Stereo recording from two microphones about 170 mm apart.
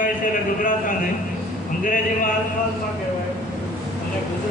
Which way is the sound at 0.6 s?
50° left (ahead or behind).